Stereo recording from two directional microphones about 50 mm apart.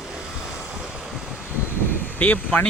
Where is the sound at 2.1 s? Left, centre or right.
Left.